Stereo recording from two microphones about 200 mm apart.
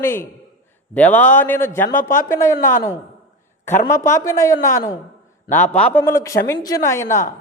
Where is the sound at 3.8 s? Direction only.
15° left (ahead or behind).